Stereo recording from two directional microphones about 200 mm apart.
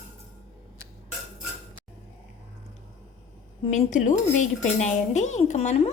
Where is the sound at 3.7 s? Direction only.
40° left (ahead or behind).